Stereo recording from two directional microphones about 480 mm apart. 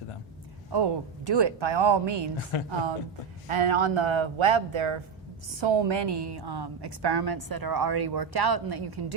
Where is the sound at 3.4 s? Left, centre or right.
Right.